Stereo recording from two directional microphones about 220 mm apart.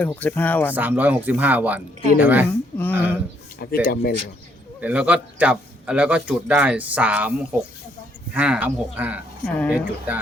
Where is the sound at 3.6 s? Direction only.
45° left (ahead or behind).